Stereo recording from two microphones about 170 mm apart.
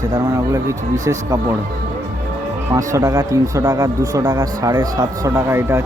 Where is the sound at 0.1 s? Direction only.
15° right (ahead or behind).